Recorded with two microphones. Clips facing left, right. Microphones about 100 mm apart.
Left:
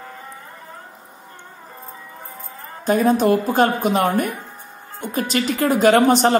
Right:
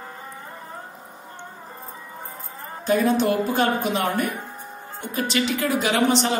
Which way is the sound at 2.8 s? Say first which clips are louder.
Left 3 dB; 45° left (ahead or behind).